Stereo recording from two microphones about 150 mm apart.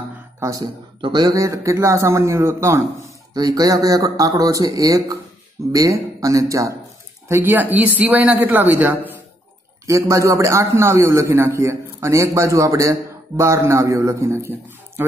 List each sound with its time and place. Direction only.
0.4 s a man's voice: 25° right (ahead or behind)